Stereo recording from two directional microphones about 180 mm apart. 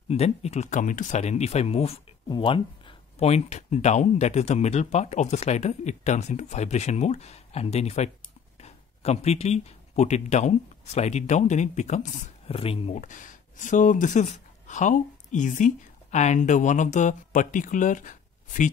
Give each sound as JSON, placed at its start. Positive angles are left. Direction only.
{"t": 0.1, "sound": "speech", "side_deg": 35}